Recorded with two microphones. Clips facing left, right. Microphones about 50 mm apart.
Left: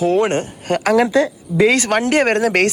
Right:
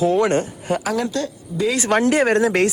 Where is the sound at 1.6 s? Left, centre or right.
Left.